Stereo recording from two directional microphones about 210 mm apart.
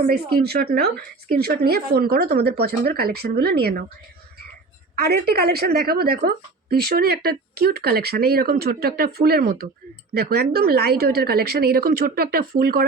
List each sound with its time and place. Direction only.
0.0 s a woman's voice: 45° right (ahead or behind)
4.9 s a woman's voice: 50° right (ahead or behind)